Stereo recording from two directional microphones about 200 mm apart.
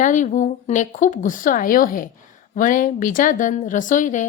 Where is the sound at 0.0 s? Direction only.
40° left (ahead or behind).